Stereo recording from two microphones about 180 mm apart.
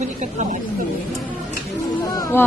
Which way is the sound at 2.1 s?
15° left (ahead or behind).